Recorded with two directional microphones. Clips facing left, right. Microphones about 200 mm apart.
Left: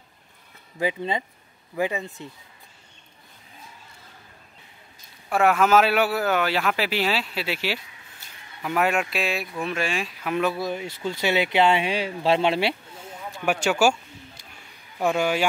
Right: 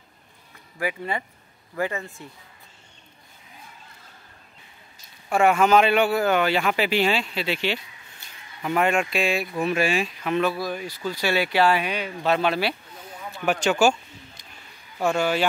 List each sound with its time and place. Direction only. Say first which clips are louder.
0.7 s speech: left 2 dB; 20° left (ahead or behind)
5.3 s a man's voice: right 1 dB; centre (ahead or behind)
10.5 s speech: left 1 dB; 25° left (ahead or behind)
13.3 s speech: right 1 dB; 10° left (ahead or behind)
15.0 s speech: even; 15° left (ahead or behind)